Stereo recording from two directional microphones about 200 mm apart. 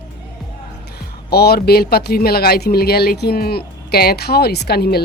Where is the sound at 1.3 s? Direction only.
55° left (ahead or behind).